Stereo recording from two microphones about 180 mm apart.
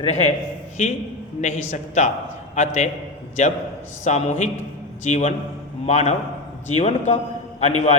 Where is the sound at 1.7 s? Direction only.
40° left (ahead or behind).